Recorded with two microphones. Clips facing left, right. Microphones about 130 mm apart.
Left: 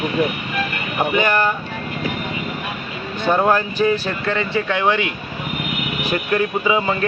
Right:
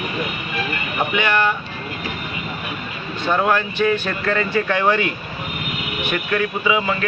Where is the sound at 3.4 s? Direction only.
30° left (ahead or behind).